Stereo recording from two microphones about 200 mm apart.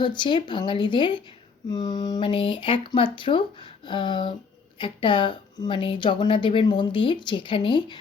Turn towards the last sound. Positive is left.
turn(degrees=25)  # may be behind; listen again after turning